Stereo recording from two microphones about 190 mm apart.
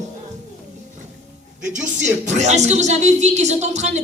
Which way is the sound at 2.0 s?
35° right (ahead or behind).